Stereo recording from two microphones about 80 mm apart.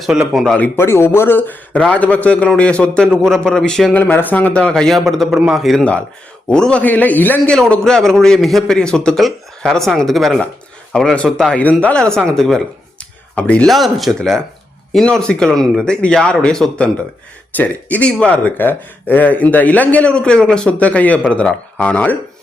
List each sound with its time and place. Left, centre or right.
0.1 s speech: centre
0.8 s a man's voice: left; by 3.9 s centre
3.9 s a man's voice: left; by 5.8 s centre
6.5 s speech: centre
7.5 s a man's voice: centre
11.5 s a man's voice: centre
13.7 s a man's voice: centre